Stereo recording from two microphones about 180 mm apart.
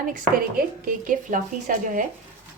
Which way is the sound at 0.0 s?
50° right (ahead or behind).